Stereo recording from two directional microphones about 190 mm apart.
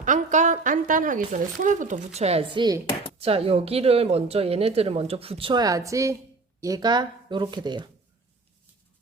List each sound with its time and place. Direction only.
0.0 s speech: 40° right (ahead or behind); by 7.9 s 25° right (ahead or behind)